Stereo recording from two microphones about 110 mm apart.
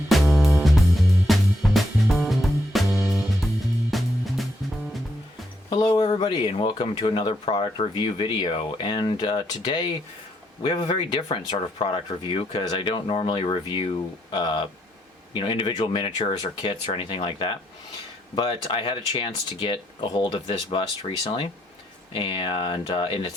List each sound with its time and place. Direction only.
0.1 s music: centre (ahead or behind)
5.7 s speech: 45° left (ahead or behind)